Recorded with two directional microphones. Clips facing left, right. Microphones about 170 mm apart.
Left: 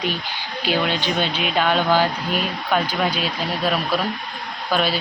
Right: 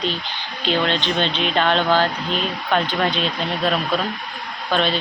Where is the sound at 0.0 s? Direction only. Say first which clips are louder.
Even; 10° left (ahead or behind).